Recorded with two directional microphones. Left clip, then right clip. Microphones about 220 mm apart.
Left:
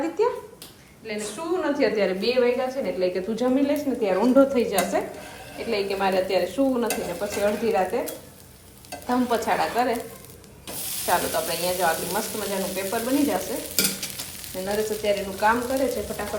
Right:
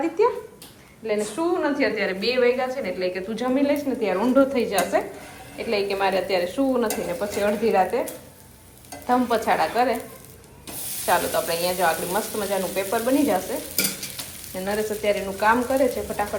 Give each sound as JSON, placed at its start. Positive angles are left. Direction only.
{"t": 0.2, "sound": "a sound", "side_deg": 10}
{"t": 1.0, "sound": "frying", "side_deg": 0}
{"t": 1.6, "sound": "a woman's voice", "side_deg": 20}
{"t": 6.8, "sound": "frying", "side_deg": 0}
{"t": 7.3, "sound": "a woman's voice", "side_deg": 10}
{"t": 8.9, "sound": "stir", "side_deg": 0}
{"t": 9.3, "sound": "a woman's voice", "side_deg": 15}
{"t": 10.7, "sound": "spray", "side_deg": 0}
{"t": 11.4, "sound": "frying", "side_deg": 10}